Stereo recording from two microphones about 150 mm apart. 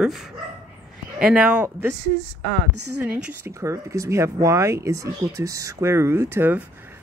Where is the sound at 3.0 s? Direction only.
10° right (ahead or behind).